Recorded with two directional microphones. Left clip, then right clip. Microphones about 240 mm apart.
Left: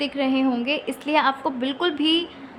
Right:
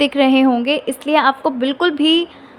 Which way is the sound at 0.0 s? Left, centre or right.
Right.